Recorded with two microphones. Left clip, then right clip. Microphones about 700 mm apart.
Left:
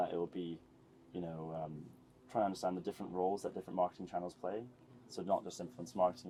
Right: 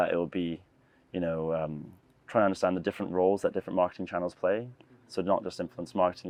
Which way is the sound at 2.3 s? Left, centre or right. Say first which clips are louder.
Right 10 dB; right.